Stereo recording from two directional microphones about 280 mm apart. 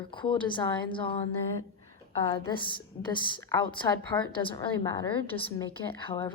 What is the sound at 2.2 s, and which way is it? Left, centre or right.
A woman's voice, centre.